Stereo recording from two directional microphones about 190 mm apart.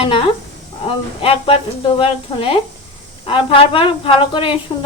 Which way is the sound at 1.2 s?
30° left (ahead or behind).